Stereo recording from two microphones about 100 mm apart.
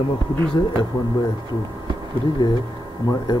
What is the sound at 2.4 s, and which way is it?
Speech, 50° left (ahead or behind).